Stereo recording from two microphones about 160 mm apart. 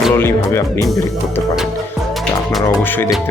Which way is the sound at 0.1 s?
15° left (ahead or behind).